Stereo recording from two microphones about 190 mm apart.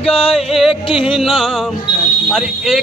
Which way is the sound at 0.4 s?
Centre (ahead or behind).